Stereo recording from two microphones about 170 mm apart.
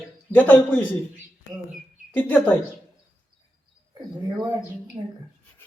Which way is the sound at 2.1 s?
10° left (ahead or behind).